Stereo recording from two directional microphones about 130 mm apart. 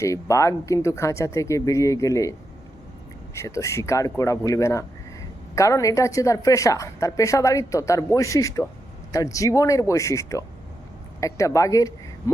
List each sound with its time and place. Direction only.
0.0 s speech: 25° left (ahead or behind)
3.3 s speech: 25° left (ahead or behind)